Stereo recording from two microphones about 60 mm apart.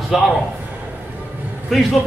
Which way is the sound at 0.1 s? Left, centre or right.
Centre.